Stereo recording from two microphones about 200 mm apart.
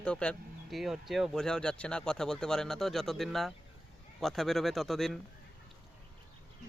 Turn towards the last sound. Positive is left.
turn(degrees=0)  # may be behind; listen again after turning